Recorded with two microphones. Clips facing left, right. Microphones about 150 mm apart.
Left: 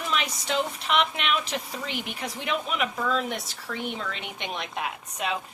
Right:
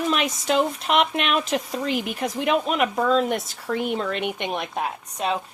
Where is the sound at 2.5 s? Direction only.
50° right (ahead or behind).